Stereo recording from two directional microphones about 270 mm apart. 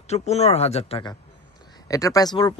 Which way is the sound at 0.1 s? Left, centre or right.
Left.